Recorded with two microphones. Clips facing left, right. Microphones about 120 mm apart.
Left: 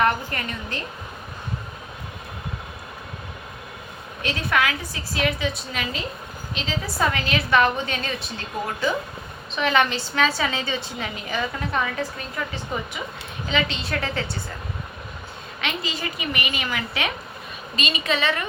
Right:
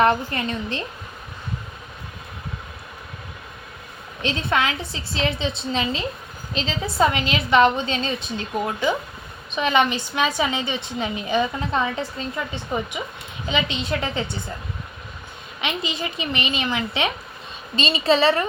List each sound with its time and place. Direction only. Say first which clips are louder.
0.0 s a woman's voice: right 3 dB; 25° right (ahead or behind)
4.2 s a woman's voice: right 1 dB; 25° right (ahead or behind)
7.0 s a woman's voice: right 4 dB; 20° right (ahead or behind)
15.6 s a woman's voice: right 2 dB; 20° right (ahead or behind)